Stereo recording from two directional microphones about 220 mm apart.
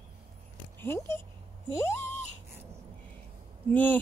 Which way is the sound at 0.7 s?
10° left (ahead or behind).